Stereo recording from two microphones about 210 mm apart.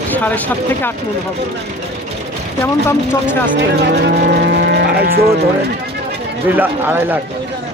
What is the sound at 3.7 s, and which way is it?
Speech, 50° right (ahead or behind).